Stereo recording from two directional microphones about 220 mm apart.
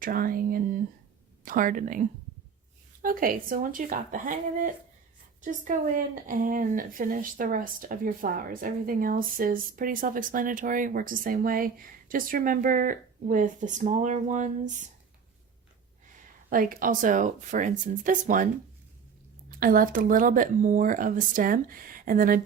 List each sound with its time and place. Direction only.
0.0 s a woman's voice: 40° right (ahead or behind)
16.1 s a woman's voice: 40° right (ahead or behind)
19.5 s a woman's voice: 40° right (ahead or behind)